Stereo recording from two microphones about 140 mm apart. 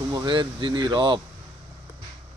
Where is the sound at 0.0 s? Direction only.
20° right (ahead or behind).